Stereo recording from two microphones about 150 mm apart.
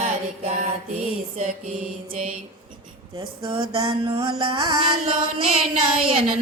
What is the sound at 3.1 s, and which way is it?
Music, 35° right (ahead or behind).